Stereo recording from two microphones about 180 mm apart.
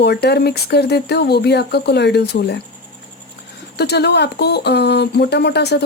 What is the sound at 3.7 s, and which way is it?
Speech, 65° left (ahead or behind).